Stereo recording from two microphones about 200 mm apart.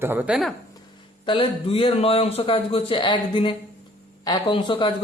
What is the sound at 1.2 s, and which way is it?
Speech, 25° left (ahead or behind).